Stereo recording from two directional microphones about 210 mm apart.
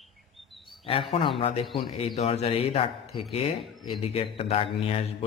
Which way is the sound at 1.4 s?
25° left (ahead or behind).